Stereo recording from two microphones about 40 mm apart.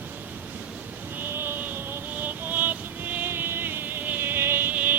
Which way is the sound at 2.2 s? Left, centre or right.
Right.